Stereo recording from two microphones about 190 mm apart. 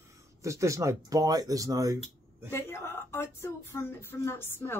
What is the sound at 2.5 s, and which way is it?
A woman's voice, 15° left (ahead or behind).